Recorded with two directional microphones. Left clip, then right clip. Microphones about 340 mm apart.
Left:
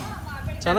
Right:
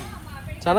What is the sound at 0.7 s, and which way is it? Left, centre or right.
Speech, centre.